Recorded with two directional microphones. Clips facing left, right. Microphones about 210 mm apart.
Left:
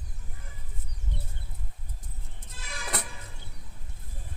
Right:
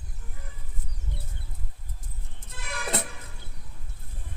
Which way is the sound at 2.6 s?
60° right (ahead or behind).